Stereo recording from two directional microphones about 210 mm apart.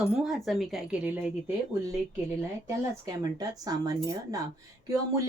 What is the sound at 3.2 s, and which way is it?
A woman's voice, 20° right (ahead or behind).